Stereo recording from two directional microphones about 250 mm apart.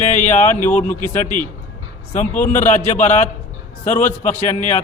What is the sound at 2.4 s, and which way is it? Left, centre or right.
A man's voice, left.